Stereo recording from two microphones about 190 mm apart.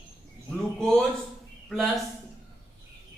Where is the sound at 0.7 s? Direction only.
5° left (ahead or behind).